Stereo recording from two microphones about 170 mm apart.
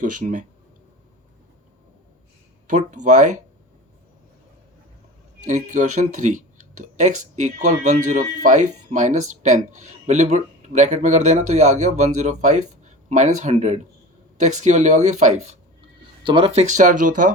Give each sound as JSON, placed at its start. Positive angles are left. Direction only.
{"t": 0.0, "sound": "speech", "side_deg": -50}
{"t": 2.6, "sound": "speech", "side_deg": -45}
{"t": 5.5, "sound": "speech", "side_deg": -45}
{"t": 16.2, "sound": "speech", "side_deg": -30}